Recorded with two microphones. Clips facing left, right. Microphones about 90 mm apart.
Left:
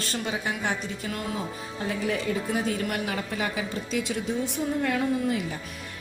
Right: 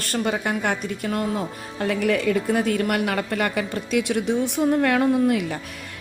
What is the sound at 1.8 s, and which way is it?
A woman's voice, 70° right (ahead or behind).